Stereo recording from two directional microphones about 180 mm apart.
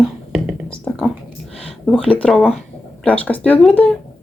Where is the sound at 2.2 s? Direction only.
5° left (ahead or behind).